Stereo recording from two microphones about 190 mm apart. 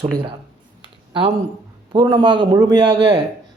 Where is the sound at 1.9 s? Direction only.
25° right (ahead or behind).